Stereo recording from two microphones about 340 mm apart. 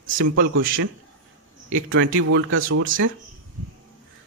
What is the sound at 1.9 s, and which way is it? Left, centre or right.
Speech, right.